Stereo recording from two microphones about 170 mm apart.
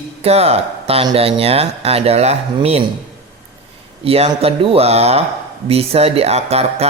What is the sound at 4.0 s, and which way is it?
Speech, 35° right (ahead or behind).